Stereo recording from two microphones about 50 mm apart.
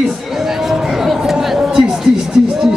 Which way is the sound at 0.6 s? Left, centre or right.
Centre.